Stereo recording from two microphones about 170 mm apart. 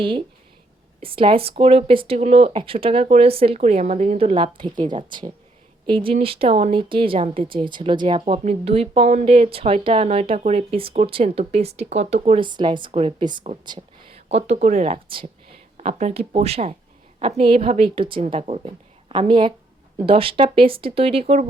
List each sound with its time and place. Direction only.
1.0 s speech: 30° right (ahead or behind)
12.5 s speech: 25° right (ahead or behind)
15.8 s speech: 40° right (ahead or behind)